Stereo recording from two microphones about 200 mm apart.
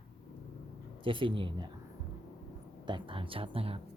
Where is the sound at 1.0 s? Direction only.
25° right (ahead or behind).